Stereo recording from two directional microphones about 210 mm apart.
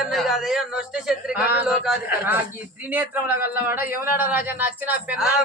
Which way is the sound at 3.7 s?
10° right (ahead or behind).